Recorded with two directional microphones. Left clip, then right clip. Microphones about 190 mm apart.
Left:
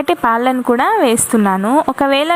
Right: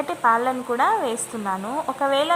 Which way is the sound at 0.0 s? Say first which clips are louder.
Left 6 dB; 30° left (ahead or behind).